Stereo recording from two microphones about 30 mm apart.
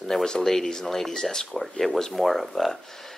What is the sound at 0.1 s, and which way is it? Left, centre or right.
Speech, centre.